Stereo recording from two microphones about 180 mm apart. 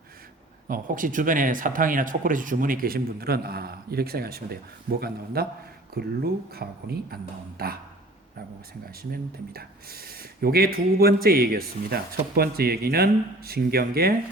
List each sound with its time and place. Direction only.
0.7 s speech: 50° right (ahead or behind)
8.9 s speech: 55° right (ahead or behind)